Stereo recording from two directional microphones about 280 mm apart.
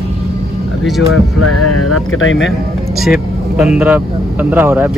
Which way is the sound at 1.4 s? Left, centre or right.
Left.